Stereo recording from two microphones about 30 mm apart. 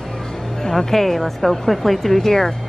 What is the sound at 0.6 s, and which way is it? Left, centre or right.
Speech, centre.